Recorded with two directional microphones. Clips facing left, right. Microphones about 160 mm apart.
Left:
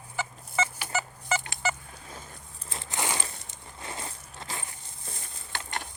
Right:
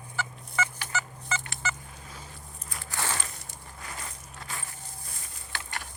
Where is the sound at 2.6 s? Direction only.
25° left (ahead or behind).